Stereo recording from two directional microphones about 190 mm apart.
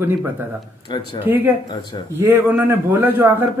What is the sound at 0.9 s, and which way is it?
Speech, 25° left (ahead or behind).